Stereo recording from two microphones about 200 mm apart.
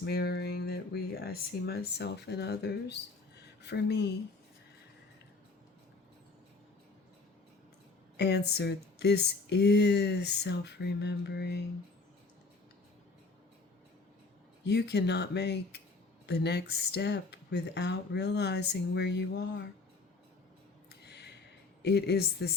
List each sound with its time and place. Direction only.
0.0 s speech: 55° left (ahead or behind)
8.1 s speech: 55° left (ahead or behind)
14.6 s speech: 55° left (ahead or behind)
21.0 s a sound: 55° left (ahead or behind)
21.8 s speech: 55° left (ahead or behind)